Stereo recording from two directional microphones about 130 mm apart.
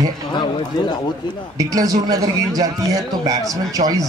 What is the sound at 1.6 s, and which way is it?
A man's voice, 25° right (ahead or behind).